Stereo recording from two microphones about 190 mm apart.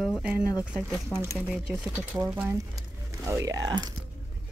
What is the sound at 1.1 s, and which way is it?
Speech, 5° left (ahead or behind).